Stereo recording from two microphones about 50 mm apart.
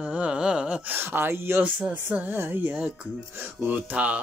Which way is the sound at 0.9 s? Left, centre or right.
Right.